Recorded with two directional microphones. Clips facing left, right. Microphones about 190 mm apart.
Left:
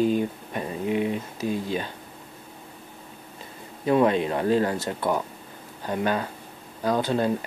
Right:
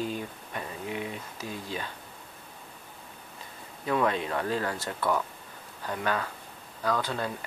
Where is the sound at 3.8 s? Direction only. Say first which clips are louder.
Left 7 dB; 25° left (ahead or behind).